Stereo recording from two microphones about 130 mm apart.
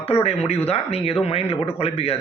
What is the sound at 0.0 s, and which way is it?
A man's voice, 50° left (ahead or behind).